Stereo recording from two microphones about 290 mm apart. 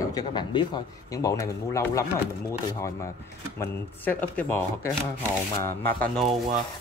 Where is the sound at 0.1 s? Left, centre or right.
Centre.